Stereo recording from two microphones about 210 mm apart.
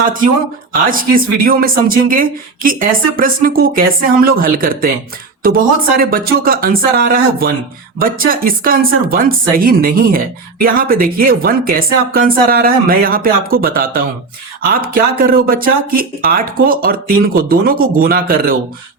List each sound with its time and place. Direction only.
0.7 s speech: 40° right (ahead or behind)